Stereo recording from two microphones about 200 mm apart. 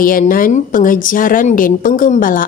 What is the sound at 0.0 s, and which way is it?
A woman's voice, 45° left (ahead or behind).